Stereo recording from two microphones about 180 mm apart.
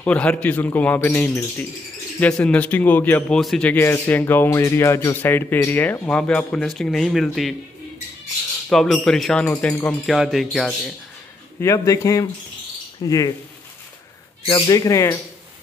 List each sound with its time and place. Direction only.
0.0 s a man's voice: 5° left (ahead or behind)
8.6 s speech: centre (ahead or behind)
11.6 s a man's voice: 15° left (ahead or behind)
14.4 s speech: 25° left (ahead or behind)